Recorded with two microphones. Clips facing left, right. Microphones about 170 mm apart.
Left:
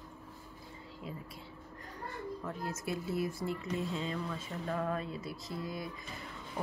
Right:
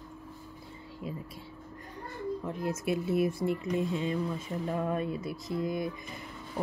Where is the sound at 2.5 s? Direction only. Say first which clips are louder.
Right 7 dB; 20° right (ahead or behind).